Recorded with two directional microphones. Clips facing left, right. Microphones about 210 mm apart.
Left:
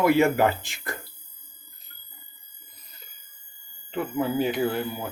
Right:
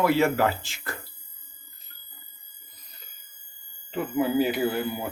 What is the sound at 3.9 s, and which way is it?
Speech, 5° right (ahead or behind).